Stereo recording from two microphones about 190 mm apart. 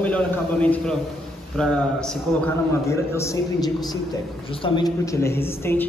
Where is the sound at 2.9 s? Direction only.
15° left (ahead or behind).